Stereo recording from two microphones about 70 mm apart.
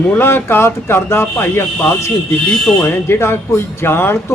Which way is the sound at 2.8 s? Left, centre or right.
Left.